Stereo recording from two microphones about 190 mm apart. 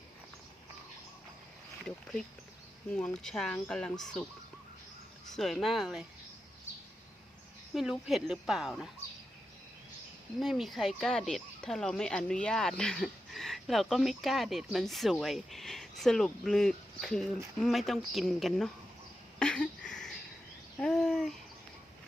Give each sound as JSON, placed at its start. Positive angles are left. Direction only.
{"t": 2.9, "sound": "speech", "side_deg": 5}
{"t": 5.3, "sound": "speech", "side_deg": 0}
{"t": 7.7, "sound": "speech", "side_deg": 0}
{"t": 10.4, "sound": "speech", "side_deg": 0}
{"t": 19.4, "sound": "a sound", "side_deg": 5}